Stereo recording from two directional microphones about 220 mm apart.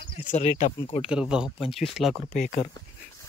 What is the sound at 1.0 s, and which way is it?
Speech, 5° right (ahead or behind).